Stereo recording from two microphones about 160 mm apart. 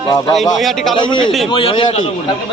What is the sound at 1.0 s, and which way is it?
A man's voice, 30° left (ahead or behind).